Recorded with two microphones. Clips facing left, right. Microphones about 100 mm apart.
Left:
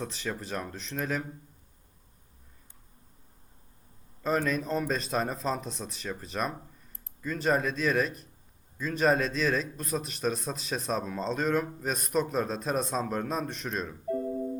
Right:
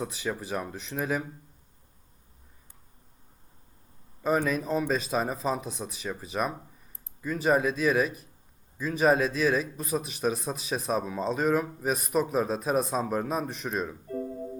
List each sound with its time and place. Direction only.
0.0 s speech: 10° right (ahead or behind)
4.2 s a man's voice: 5° right (ahead or behind)